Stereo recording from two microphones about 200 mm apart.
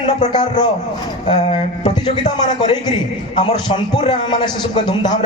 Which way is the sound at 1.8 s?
25° left (ahead or behind).